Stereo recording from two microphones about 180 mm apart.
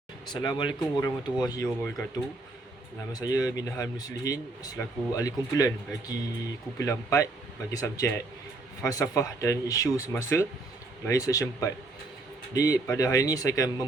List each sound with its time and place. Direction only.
0.3 s speech: 25° left (ahead or behind)
3.1 s speech: 20° left (ahead or behind)